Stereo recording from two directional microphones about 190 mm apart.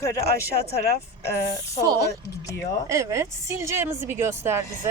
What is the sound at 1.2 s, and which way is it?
Speech, 15° left (ahead or behind).